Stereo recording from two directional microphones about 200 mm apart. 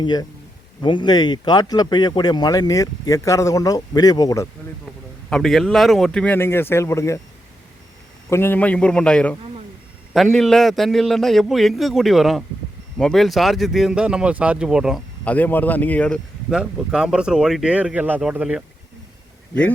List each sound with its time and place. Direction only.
0.0 s speech: 20° left (ahead or behind)
5.3 s speech: centre (ahead or behind)
8.3 s speech: 10° left (ahead or behind); by 18.6 s 5° right (ahead or behind)